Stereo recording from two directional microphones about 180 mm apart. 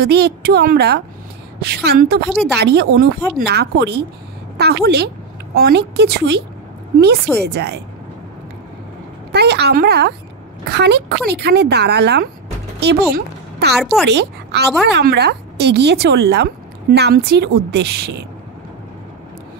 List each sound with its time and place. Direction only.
0.0 s a woman's voice: 60° right (ahead or behind)
7.4 s a woman's voice: 65° right (ahead or behind)
9.3 s a woman's voice: 65° right (ahead or behind)